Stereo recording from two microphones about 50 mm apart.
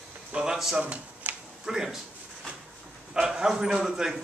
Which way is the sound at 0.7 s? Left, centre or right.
Right.